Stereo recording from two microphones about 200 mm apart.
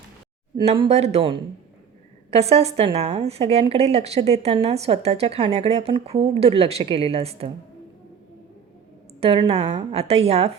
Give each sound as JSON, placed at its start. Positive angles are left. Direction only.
{"t": 0.6, "sound": "a woman's voice", "side_deg": -30}
{"t": 9.2, "sound": "a woman's voice", "side_deg": -25}